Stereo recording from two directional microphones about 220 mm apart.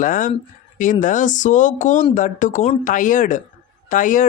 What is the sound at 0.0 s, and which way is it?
Speech, 35° left (ahead or behind).